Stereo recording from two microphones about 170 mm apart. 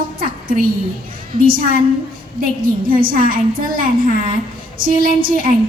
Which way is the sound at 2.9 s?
55° right (ahead or behind).